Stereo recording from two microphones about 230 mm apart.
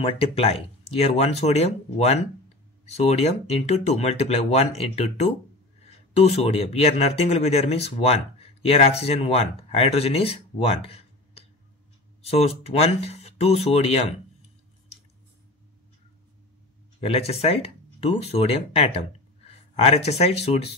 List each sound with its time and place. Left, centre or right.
0.0 s speech: left
17.0 s speech: left